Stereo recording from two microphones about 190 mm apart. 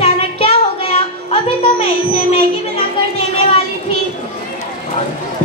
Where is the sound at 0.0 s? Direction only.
30° left (ahead or behind).